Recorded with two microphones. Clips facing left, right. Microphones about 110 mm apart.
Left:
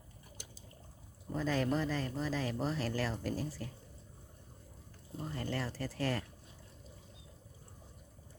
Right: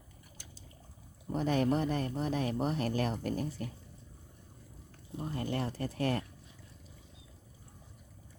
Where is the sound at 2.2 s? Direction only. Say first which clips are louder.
Right 3 dB; 60° right (ahead or behind).